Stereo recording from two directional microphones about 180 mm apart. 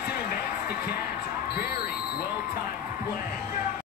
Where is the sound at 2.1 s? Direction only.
55° left (ahead or behind).